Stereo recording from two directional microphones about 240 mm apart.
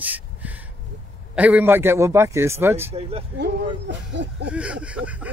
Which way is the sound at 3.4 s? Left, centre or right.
Right.